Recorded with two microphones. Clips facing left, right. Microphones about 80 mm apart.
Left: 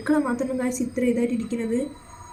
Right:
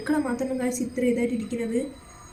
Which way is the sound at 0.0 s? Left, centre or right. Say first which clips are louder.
Left 3 dB; left.